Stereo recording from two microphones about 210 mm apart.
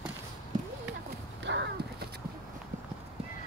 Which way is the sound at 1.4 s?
55° right (ahead or behind).